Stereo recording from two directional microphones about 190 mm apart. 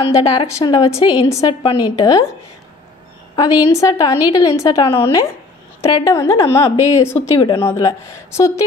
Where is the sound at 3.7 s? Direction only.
15° left (ahead or behind).